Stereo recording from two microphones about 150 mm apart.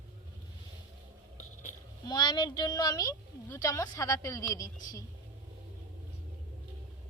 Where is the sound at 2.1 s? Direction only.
30° left (ahead or behind).